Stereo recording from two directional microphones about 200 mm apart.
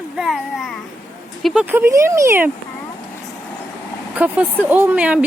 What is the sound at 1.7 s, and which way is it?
Speech, 15° right (ahead or behind).